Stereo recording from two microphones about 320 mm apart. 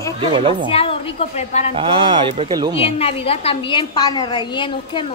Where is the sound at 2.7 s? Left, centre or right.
Centre.